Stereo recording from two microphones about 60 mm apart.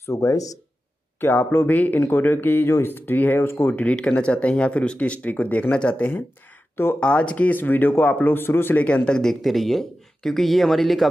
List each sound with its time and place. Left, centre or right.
0.1 s speech: left
1.2 s speech: left
3.7 s speech: centre; by 8.7 s left
8.7 s speech: left; by 11.1 s centre